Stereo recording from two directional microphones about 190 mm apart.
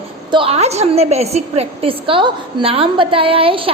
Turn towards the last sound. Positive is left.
turn(degrees=-30)  # may be behind; listen again after turning